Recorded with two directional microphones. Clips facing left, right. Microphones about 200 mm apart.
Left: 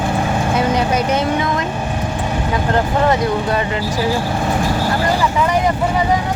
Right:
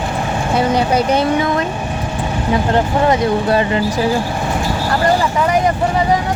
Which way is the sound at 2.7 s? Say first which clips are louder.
Even; 20° right (ahead or behind).